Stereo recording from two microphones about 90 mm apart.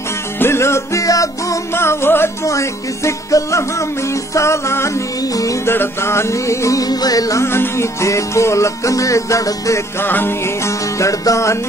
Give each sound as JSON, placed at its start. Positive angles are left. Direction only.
{"t": 0.4, "sound": "music", "side_deg": 30}
{"t": 5.7, "sound": "music", "side_deg": 25}
{"t": 9.9, "sound": "music", "side_deg": 25}